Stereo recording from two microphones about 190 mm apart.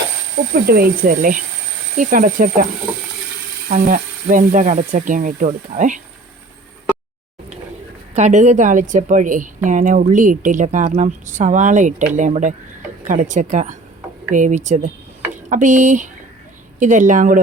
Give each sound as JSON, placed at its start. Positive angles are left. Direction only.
{"t": 0.5, "sound": "speech", "side_deg": -50}
{"t": 3.7, "sound": "speech", "side_deg": -45}
{"t": 8.1, "sound": "a woman's voice", "side_deg": -40}